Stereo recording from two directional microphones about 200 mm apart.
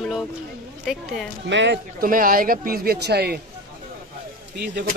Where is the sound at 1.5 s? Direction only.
65° right (ahead or behind).